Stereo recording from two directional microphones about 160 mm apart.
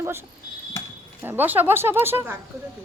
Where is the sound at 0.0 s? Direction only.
15° right (ahead or behind).